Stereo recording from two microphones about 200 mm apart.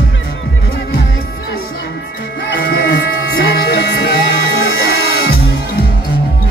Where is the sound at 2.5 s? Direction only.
55° left (ahead or behind).